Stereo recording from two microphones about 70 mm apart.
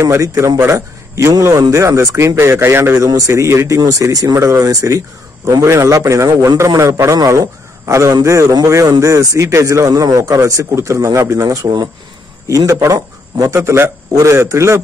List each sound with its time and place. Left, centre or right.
0.0 s a man's voice: right
5.6 s a man's voice: right
6.8 s a man's voice: right
11.6 s speech: right
12.4 s a man's voice: right
13.6 s a man's voice: right